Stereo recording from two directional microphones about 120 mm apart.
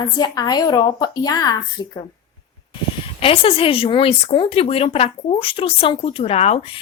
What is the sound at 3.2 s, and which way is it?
Speech, 50° left (ahead or behind).